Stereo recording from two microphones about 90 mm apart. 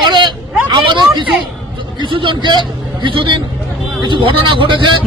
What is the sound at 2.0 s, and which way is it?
A man's voice, 65° right (ahead or behind).